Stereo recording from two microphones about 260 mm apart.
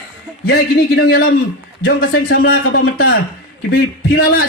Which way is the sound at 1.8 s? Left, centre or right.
Left.